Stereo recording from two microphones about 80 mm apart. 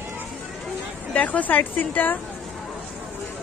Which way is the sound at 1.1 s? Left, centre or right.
Centre.